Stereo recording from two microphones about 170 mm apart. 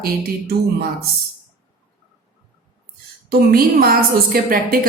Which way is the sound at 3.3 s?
60° right (ahead or behind).